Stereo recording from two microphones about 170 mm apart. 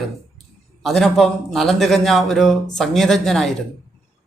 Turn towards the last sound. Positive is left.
turn(degrees=0)  # may be behind; listen again after turning